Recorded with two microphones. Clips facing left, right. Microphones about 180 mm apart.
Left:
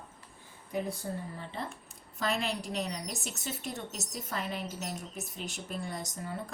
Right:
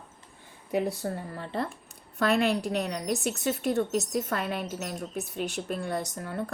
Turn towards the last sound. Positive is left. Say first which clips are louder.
# right 5 dB
turn(degrees=-65)  # may be behind; listen again after turning